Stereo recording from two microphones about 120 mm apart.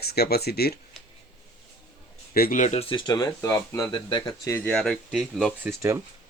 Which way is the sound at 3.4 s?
20° left (ahead or behind).